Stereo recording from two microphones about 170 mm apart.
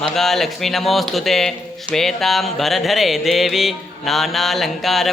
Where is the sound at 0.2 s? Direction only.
Centre (ahead or behind).